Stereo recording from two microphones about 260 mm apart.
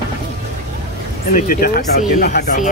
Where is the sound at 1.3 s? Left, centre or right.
Left.